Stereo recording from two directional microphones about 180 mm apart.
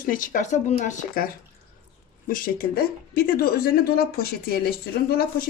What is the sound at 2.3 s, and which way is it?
Speech, 50° left (ahead or behind).